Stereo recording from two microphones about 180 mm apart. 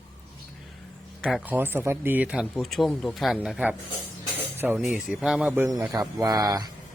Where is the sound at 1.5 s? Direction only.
10° right (ahead or behind).